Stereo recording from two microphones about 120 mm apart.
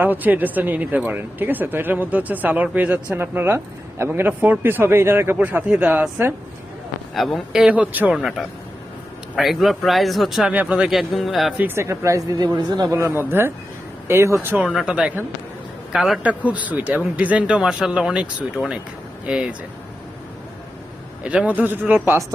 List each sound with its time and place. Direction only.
0.0 s speech: 15° right (ahead or behind)
7.2 s speech: centre (ahead or behind)
11.5 s speech: 15° right (ahead or behind)
14.8 s speech: 10° right (ahead or behind)
21.2 s speech: 10° right (ahead or behind)